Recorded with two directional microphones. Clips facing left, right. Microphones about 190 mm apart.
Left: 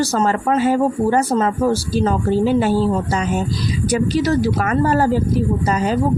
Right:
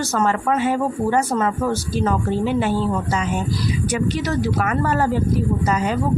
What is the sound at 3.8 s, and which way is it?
A woman's voice, 35° left (ahead or behind).